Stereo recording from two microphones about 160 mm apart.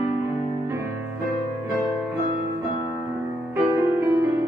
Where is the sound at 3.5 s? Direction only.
15° right (ahead or behind).